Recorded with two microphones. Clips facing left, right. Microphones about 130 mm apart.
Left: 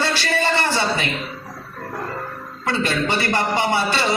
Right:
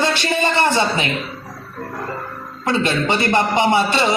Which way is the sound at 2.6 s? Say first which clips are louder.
Right 3 dB; 20° right (ahead or behind).